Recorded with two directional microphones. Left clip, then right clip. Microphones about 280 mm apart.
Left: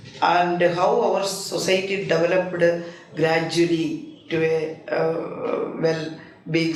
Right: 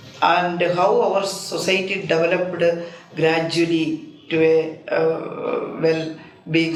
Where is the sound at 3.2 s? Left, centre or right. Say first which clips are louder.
Right 1 dB; right.